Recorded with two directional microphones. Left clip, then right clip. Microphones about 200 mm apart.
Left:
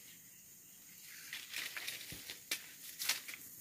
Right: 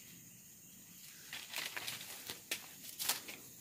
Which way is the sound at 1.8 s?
25° right (ahead or behind).